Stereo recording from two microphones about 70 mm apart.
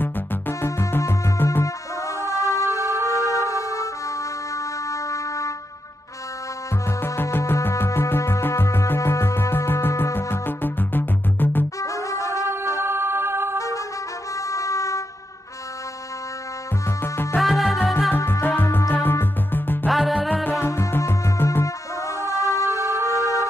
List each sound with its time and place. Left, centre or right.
0.0 s music: left
2.1 s music: left
4.8 s a sound: left
7.0 s music: left
11.8 s music: left
12.8 s music: right
14.5 s vehicle: left
17.0 s music: left
17.4 s music: centre
18.1 s music: left
19.9 s music: centre
21.0 s music: left
21.6 s music: left